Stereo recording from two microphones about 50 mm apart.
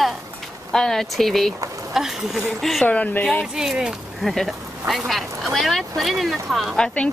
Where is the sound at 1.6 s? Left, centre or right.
Right.